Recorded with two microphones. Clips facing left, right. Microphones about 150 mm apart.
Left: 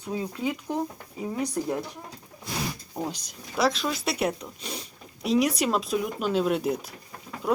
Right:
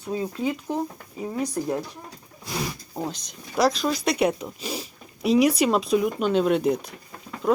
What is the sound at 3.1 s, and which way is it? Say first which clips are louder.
Speech: right 4 dB; 5° left (ahead or behind).